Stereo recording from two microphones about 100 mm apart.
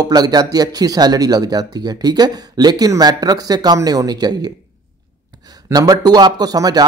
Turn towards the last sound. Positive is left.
turn(degrees=-40)  # may be behind; listen again after turning